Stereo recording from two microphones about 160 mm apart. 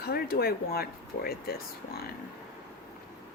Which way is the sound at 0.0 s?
75° left (ahead or behind).